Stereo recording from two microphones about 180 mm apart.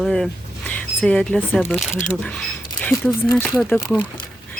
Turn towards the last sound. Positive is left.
turn(degrees=5)  # may be behind; listen again after turning